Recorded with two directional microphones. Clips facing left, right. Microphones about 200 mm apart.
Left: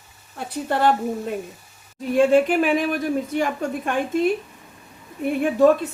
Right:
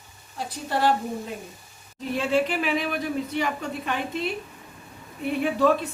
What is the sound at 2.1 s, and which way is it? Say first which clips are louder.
A woman's voice: left 8 dB; 50° left (ahead or behind).